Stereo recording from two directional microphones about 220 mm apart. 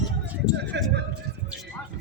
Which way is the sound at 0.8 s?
55° right (ahead or behind).